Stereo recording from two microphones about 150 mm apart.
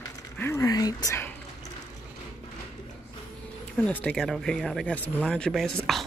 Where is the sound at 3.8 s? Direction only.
5° left (ahead or behind).